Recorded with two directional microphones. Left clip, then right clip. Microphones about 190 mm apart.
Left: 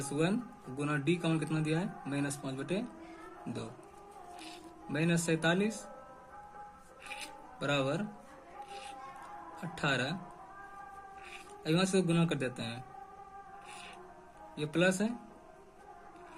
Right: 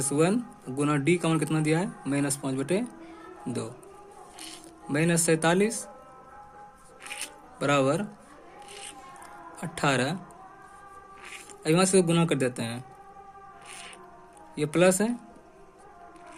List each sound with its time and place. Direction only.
0.1 s speech: 40° right (ahead or behind)
4.9 s speech: 40° right (ahead or behind)
7.6 s speech: 45° right (ahead or behind)
9.6 s speech: 45° right (ahead or behind)
11.3 s speech: 45° right (ahead or behind)
14.5 s speech: 40° right (ahead or behind)